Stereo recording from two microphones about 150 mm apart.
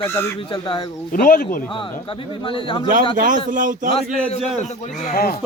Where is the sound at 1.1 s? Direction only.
70° left (ahead or behind).